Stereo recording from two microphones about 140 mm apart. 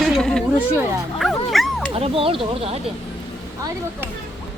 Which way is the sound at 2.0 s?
40° right (ahead or behind).